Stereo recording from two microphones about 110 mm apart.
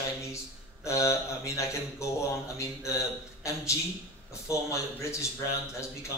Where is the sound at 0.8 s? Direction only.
25° left (ahead or behind).